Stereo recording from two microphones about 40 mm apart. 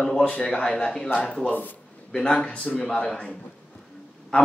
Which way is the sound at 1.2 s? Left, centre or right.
Left.